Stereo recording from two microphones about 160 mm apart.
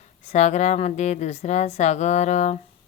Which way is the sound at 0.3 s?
45° left (ahead or behind).